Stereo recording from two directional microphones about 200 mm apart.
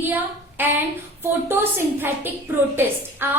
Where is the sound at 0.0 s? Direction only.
10° right (ahead or behind).